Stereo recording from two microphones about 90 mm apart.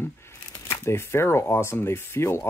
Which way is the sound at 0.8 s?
30° left (ahead or behind).